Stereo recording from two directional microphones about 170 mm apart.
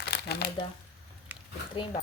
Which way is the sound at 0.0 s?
75° left (ahead or behind).